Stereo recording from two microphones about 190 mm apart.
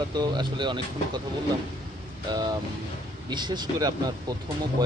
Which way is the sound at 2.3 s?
20° right (ahead or behind).